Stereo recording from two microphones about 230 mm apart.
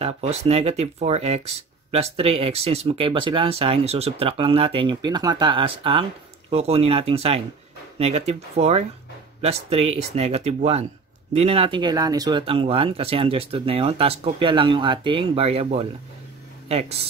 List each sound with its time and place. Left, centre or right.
0.0 s speech: right